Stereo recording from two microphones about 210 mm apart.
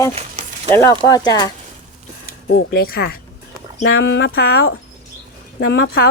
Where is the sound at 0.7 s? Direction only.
15° left (ahead or behind).